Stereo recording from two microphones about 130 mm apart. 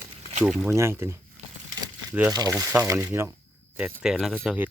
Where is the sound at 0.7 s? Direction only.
20° right (ahead or behind).